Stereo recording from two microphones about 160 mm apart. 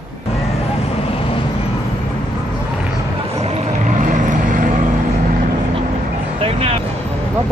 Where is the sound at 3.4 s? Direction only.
40° right (ahead or behind).